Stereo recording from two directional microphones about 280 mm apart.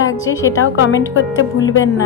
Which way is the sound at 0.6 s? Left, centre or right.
Left.